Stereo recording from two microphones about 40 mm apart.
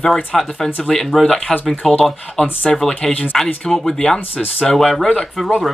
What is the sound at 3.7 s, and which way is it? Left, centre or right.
Speech, centre.